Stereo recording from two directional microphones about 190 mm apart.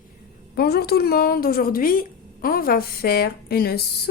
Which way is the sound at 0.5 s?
55° left (ahead or behind).